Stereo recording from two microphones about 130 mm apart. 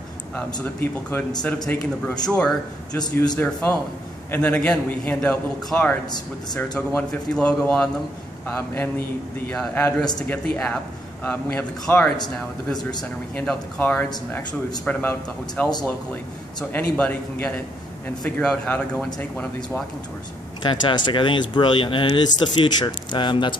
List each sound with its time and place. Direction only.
0.6 s a man's voice: 15° left (ahead or behind)
13.4 s a man's voice: 10° left (ahead or behind)
16.7 s a man's voice: 10° left (ahead or behind)
20.6 s speech: 35° left (ahead or behind)